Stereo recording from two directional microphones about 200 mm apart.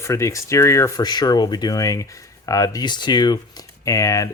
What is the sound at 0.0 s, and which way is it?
Speech, 15° left (ahead or behind).